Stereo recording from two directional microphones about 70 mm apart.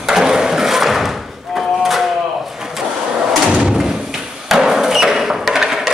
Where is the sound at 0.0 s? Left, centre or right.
Centre.